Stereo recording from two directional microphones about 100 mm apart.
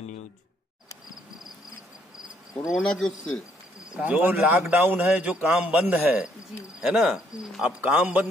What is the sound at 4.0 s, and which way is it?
A man's voice, 15° right (ahead or behind).